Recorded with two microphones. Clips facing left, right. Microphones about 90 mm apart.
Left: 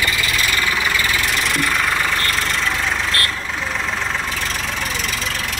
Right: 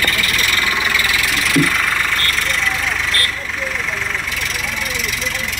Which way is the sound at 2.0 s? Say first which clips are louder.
Even; 20° left (ahead or behind).